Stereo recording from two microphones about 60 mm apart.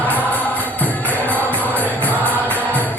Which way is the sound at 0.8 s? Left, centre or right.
Left.